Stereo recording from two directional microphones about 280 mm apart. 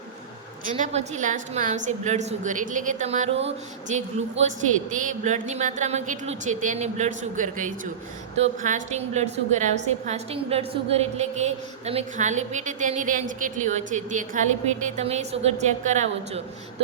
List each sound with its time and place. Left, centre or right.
0.8 s a woman's voice: right